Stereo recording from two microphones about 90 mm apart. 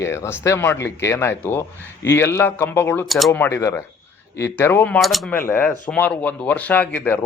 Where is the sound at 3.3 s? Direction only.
20° left (ahead or behind).